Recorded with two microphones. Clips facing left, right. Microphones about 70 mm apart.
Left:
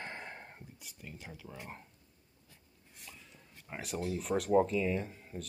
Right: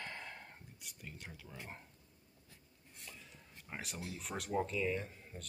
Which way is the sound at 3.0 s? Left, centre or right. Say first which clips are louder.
Left 1 dB; centre.